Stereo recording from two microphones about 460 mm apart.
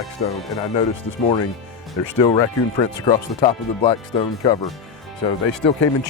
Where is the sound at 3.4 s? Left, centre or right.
Centre.